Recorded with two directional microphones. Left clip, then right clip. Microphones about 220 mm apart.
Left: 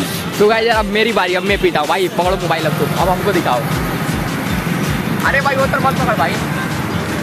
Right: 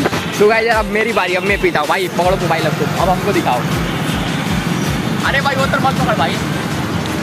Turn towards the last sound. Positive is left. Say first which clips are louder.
# left 1 dB
turn(degrees=0)  # may be behind; listen again after turning